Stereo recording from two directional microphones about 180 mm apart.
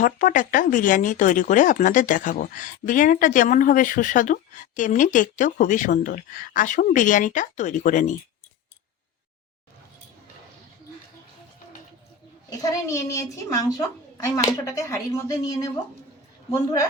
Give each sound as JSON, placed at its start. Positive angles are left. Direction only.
{"t": 0.0, "sound": "speech", "side_deg": 45}
{"t": 12.5, "sound": "a woman's voice", "side_deg": 20}